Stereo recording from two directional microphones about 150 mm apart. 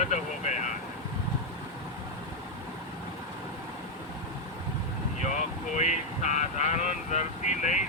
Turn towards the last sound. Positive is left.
turn(degrees=55)  # may be behind; listen again after turning